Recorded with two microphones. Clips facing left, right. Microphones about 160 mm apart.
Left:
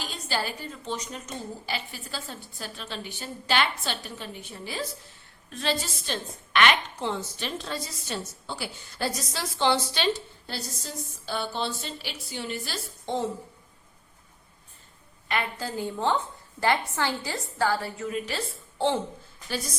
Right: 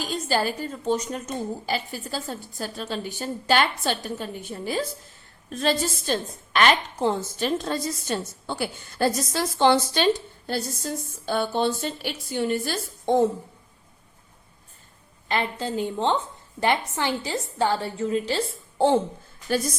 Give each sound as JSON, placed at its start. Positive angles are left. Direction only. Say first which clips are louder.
{"t": 0.0, "sound": "a woman's voice", "louder": "right 7 dB", "side_deg": -45}
{"t": 15.3, "sound": "a woman's voice", "louder": "right 4 dB", "side_deg": -25}